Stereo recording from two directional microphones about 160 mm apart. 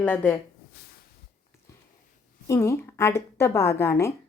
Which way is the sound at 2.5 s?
15° left (ahead or behind).